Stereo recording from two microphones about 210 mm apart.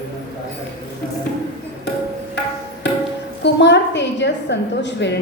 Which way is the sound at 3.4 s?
55° left (ahead or behind).